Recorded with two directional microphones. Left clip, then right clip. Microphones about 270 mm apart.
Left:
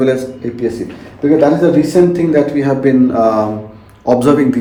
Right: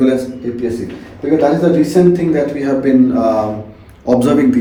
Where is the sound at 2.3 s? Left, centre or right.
Left.